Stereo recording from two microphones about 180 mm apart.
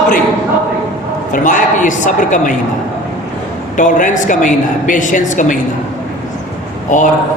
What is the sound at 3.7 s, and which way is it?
A woman's voice, 45° left (ahead or behind).